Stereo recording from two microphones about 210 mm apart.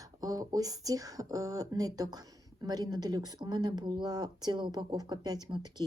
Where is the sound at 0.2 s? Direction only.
15° right (ahead or behind).